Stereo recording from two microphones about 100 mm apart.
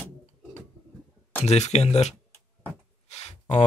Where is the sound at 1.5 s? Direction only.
90° left.